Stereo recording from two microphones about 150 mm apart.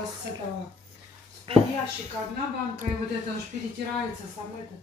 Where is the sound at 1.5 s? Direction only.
40° right (ahead or behind).